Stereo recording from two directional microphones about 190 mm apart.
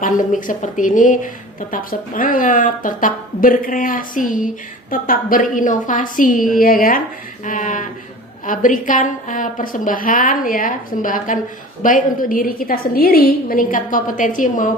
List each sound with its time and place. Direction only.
0.0 s a woman's voice: 45° left (ahead or behind)